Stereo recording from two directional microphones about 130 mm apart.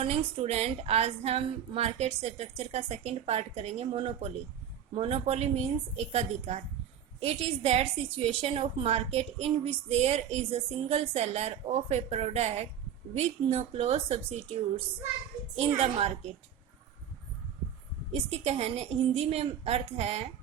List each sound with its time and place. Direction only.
0.0 s a woman's voice: 45° right (ahead or behind)
18.1 s a woman's voice: 50° right (ahead or behind)